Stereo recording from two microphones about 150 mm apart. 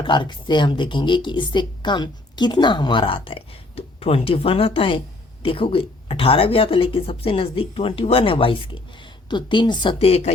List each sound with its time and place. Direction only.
0.0 s speech: 30° left (ahead or behind)